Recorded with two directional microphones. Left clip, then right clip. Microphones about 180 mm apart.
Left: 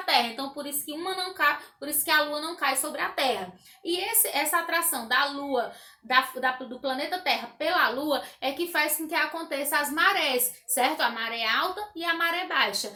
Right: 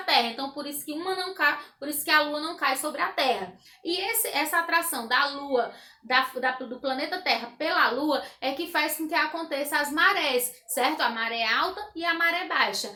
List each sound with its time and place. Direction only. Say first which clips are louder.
0.0 s a woman's voice: right 1 dB; 5° right (ahead or behind)